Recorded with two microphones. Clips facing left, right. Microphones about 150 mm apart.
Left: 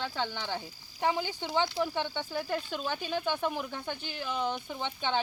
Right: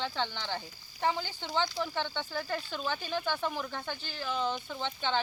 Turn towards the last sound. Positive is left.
turn(degrees=15)  # may be behind; listen again after turning